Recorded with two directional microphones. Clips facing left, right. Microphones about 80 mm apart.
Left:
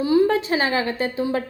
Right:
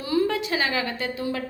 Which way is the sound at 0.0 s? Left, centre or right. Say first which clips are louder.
Left 6 dB; left.